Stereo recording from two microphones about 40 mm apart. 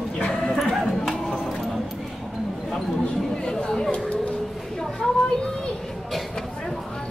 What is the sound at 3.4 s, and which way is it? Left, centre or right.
Chatter, centre.